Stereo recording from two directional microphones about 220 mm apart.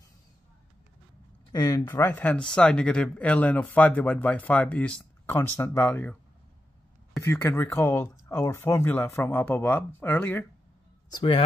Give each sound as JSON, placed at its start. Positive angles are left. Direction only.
{"t": 1.5, "sound": "speech", "side_deg": 15}
{"t": 7.2, "sound": "speech", "side_deg": 10}
{"t": 11.1, "sound": "a man's voice", "side_deg": 20}